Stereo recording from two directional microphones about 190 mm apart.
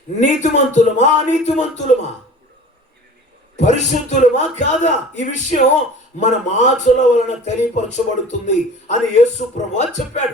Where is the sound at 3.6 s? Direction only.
40° left (ahead or behind).